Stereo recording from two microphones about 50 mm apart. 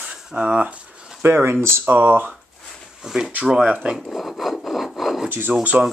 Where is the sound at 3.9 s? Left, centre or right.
Centre.